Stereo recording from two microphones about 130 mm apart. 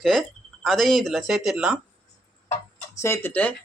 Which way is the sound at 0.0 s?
Centre (ahead or behind).